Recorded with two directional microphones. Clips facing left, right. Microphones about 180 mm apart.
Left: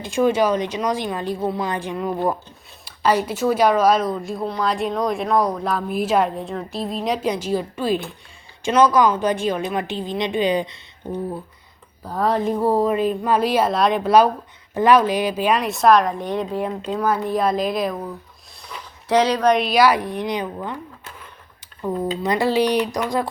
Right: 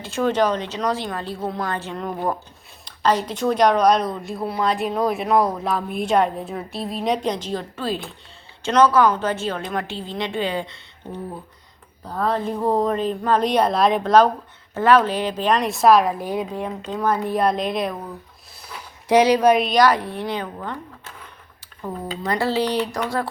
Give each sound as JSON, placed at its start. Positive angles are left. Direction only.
{"t": 0.0, "sound": "a woman's voice", "side_deg": 15}
{"t": 12.0, "sound": "a woman's voice", "side_deg": 10}
{"t": 14.7, "sound": "speech", "side_deg": 15}
{"t": 16.6, "sound": "speech", "side_deg": 10}
{"t": 18.6, "sound": "speech", "side_deg": -10}
{"t": 21.8, "sound": "a woman's voice", "side_deg": 15}